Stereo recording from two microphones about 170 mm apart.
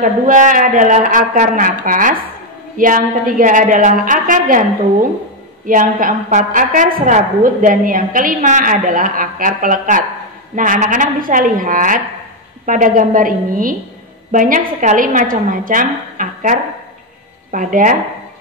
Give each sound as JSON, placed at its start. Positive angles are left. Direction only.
{"t": 0.0, "sound": "a woman's voice", "side_deg": -50}
{"t": 5.7, "sound": "a woman's voice", "side_deg": -55}